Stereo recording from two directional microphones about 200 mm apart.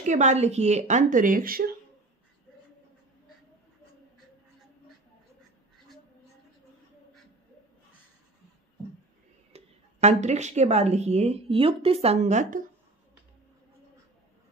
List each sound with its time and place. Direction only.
0.0 s a woman's voice: 35° right (ahead or behind)
9.5 s a woman's voice: 35° right (ahead or behind)